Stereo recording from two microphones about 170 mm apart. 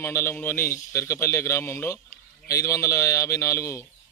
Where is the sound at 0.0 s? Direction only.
15° left (ahead or behind).